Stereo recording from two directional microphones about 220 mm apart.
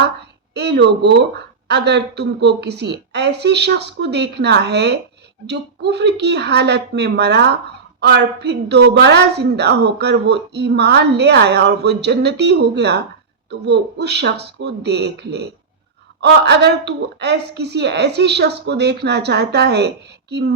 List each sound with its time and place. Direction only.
0.5 s a woman's voice: 50° right (ahead or behind)